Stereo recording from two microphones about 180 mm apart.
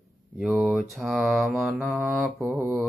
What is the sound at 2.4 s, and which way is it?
Mantra, 10° right (ahead or behind).